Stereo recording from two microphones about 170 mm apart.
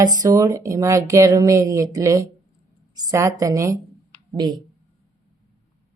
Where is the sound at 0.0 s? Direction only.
20° right (ahead or behind).